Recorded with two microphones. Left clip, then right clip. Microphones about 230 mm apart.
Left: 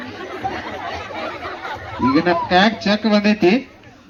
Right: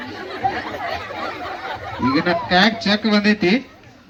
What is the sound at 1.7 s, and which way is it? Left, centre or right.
Speech, right.